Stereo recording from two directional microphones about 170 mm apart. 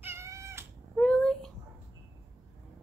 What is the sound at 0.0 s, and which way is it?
Cat, 15° right (ahead or behind).